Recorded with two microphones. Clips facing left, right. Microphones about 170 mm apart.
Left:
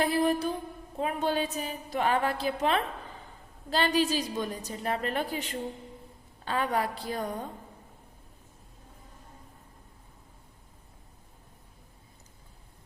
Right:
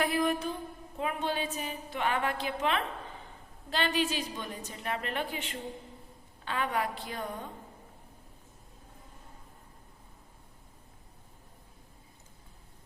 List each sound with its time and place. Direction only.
0.0 s a woman's voice: 30° left (ahead or behind)